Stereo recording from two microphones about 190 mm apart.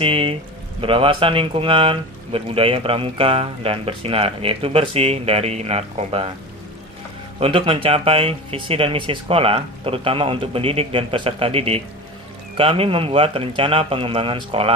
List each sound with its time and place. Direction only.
0.0 s speech: 30° right (ahead or behind)
7.3 s speech: 30° right (ahead or behind)